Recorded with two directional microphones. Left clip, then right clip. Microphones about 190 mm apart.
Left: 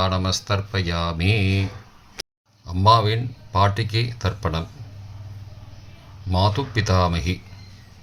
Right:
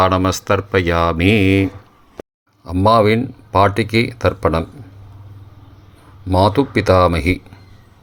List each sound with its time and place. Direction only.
0.0 s speech: 45° right (ahead or behind)
2.6 s speech: 45° right (ahead or behind)
6.3 s speech: 45° right (ahead or behind)